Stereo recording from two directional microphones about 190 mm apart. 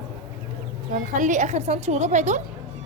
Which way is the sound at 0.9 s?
40° right (ahead or behind).